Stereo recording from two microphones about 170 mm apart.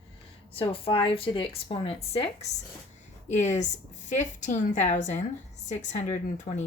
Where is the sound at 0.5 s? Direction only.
30° left (ahead or behind).